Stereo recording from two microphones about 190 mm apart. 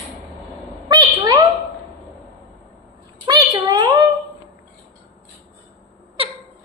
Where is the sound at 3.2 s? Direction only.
20° right (ahead or behind).